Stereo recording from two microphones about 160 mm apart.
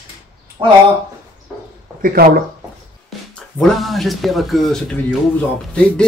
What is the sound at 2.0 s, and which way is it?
Speech, 65° right (ahead or behind).